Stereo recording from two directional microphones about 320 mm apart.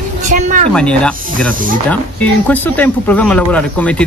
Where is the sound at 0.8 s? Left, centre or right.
Centre.